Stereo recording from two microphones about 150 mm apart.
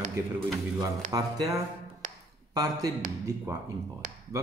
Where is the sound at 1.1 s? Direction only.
25° right (ahead or behind).